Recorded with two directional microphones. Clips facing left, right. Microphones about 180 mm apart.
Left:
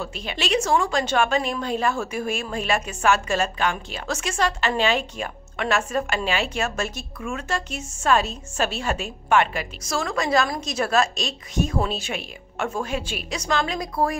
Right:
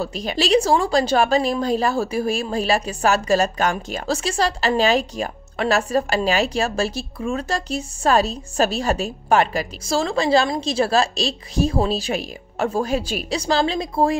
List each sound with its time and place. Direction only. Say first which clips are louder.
0.0 s a woman's voice: right 6 dB; 40° right (ahead or behind)